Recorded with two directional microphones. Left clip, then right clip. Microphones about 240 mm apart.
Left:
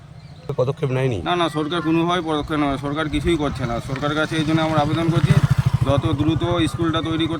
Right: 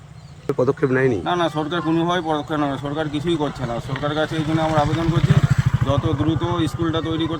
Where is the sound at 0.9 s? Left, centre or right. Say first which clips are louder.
Right 4 dB; left.